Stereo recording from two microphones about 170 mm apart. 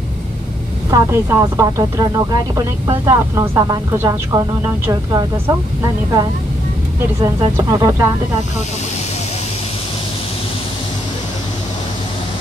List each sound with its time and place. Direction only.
0.8 s speech: 20° right (ahead or behind)
7.2 s speech: 20° right (ahead or behind)